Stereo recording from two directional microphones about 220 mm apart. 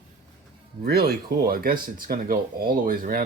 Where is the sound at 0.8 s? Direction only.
45° right (ahead or behind).